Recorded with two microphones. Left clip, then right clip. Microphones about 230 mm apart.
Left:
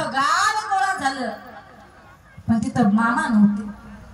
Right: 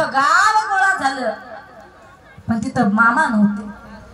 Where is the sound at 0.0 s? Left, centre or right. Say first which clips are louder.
Right 5 dB; centre.